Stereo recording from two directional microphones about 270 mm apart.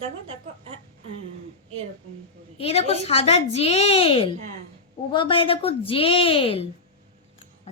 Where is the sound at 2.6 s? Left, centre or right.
Left.